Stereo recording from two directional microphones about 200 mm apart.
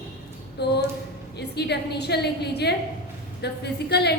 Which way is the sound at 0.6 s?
55° left (ahead or behind).